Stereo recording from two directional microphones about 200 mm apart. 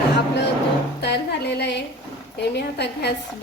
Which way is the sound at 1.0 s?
55° left (ahead or behind).